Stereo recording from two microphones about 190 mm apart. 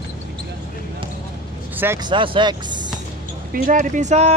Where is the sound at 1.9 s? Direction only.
25° right (ahead or behind).